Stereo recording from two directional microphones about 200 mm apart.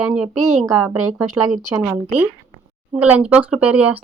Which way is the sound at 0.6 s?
15° right (ahead or behind).